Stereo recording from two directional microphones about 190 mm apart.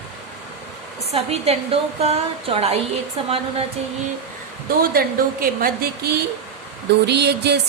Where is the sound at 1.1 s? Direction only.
35° right (ahead or behind).